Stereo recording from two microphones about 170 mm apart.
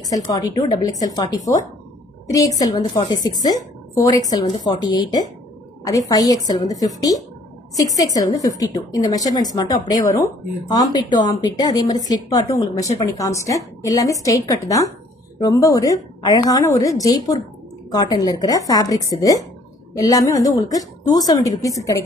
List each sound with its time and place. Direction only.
0.1 s a woman's voice: 20° left (ahead or behind)